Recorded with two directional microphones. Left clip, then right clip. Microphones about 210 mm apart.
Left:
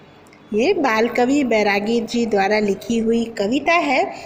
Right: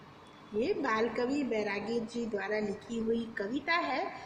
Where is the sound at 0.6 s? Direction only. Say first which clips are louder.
Left 14 dB; 40° left (ahead or behind).